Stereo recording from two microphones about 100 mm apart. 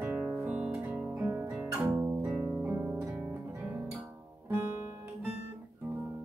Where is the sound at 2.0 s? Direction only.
30° right (ahead or behind).